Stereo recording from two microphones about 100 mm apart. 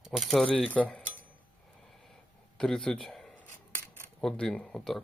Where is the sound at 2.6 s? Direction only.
5° left (ahead or behind).